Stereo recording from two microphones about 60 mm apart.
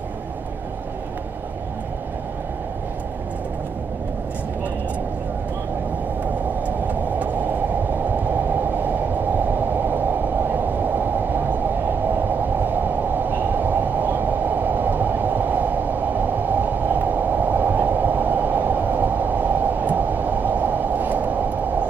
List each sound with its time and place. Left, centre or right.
6.6 s vehicle: right
10.5 s train: right
12.6 s train: right